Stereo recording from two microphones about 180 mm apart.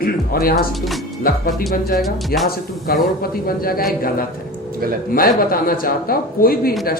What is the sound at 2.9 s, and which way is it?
Speech, 55° left (ahead or behind).